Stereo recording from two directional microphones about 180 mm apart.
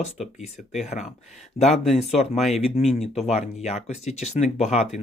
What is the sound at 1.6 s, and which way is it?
Speech, 35° left (ahead or behind).